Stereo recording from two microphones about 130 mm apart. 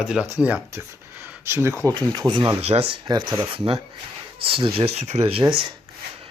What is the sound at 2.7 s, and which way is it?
Speech, 50° right (ahead or behind).